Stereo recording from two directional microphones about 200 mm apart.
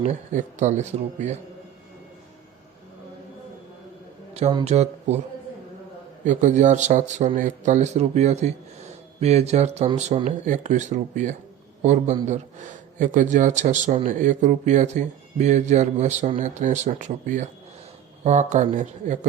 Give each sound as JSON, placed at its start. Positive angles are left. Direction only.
{"t": 0.0, "sound": "a man's voice", "side_deg": -35}
{"t": 4.4, "sound": "a man's voice", "side_deg": -30}
{"t": 6.2, "sound": "a man's voice", "side_deg": -35}